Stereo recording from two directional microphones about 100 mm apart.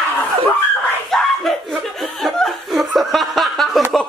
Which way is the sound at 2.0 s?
Centre (ahead or behind).